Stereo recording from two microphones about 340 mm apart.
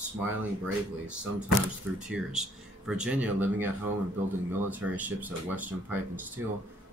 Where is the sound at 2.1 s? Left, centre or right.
Centre.